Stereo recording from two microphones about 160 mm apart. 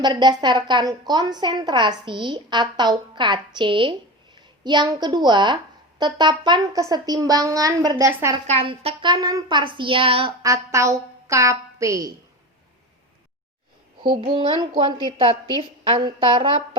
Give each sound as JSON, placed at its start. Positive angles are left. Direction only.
{"t": 0.0, "sound": "a woman's voice", "side_deg": -25}
{"t": 8.4, "sound": "speech", "side_deg": -35}
{"t": 10.4, "sound": "a woman's voice", "side_deg": -20}
{"t": 14.0, "sound": "a woman's voice", "side_deg": -30}